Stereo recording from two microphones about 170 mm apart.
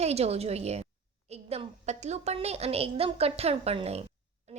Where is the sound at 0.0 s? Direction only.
40° right (ahead or behind).